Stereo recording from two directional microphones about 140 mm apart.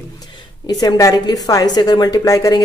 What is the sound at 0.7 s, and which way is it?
A woman's voice, 25° left (ahead or behind).